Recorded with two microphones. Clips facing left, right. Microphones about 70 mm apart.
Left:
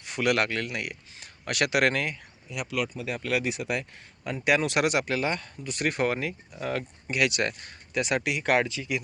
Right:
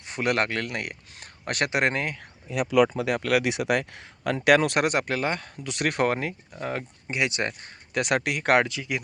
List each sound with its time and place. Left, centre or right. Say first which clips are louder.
0.0 s speech: even; right
3.0 s speech: right 5 dB; right
5.6 s speech: right 2 dB; right
7.9 s speech: right 2 dB; right